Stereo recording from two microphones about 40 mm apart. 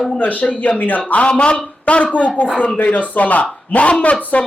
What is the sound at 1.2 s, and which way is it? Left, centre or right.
Speech, left.